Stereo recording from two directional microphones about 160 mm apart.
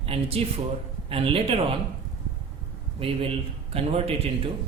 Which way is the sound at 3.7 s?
40° right (ahead or behind).